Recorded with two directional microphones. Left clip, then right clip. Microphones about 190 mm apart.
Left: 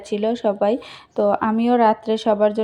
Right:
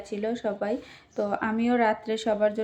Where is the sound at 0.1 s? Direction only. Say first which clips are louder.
Left 9 dB; 35° left (ahead or behind).